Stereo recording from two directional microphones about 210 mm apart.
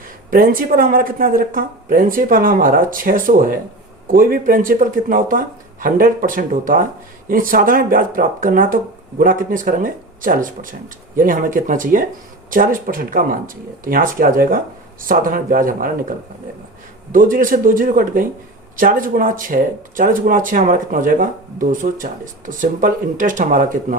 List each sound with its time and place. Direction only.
0.3 s speech: 45° right (ahead or behind)